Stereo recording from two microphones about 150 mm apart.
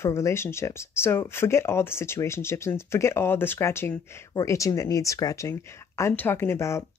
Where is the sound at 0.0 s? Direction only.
15° left (ahead or behind).